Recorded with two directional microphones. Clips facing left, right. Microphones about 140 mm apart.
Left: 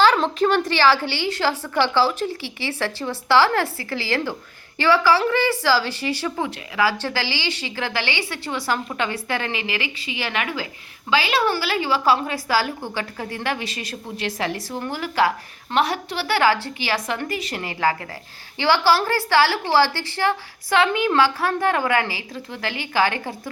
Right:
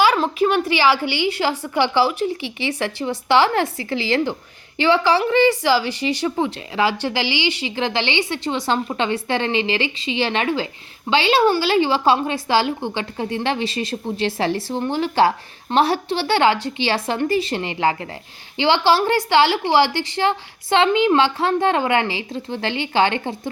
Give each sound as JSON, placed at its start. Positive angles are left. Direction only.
{"t": 0.0, "sound": "a woman's voice", "side_deg": -10}